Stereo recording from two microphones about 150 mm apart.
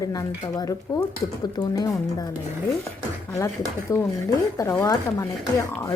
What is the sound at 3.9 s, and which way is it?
A woman's voice, 20° left (ahead or behind).